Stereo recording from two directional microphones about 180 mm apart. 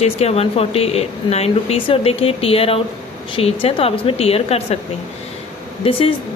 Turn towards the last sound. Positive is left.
turn(degrees=30)  # may be behind; listen again after turning